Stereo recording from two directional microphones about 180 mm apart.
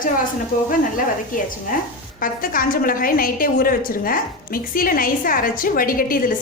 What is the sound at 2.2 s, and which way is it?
A woman's voice, 50° left (ahead or behind).